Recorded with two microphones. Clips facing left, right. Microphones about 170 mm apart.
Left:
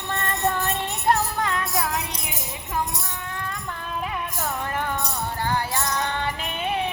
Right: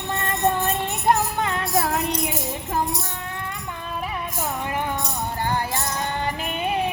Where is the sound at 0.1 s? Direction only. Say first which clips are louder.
Right 2 dB; 15° right (ahead or behind).